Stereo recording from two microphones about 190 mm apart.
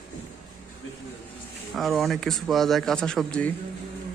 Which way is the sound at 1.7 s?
Centre (ahead or behind).